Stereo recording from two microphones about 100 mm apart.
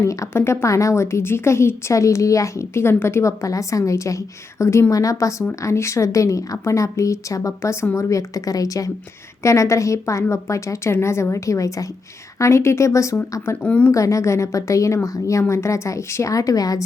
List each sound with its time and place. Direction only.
0.0 s a woman's voice: 30° left (ahead or behind)
13.6 s speech: 15° left (ahead or behind)
13.9 s a woman's voice: 30° left (ahead or behind)